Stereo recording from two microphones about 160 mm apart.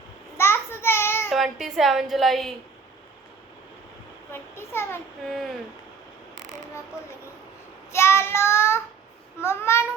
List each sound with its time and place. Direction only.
0.3 s a sound: 15° left (ahead or behind)
1.3 s a woman's voice: centre (ahead or behind)
4.3 s child singing: 15° left (ahead or behind)
7.9 s child singing: 15° left (ahead or behind)